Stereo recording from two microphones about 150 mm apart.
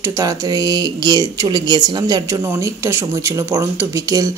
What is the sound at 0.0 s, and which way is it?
A woman's voice, 20° right (ahead or behind).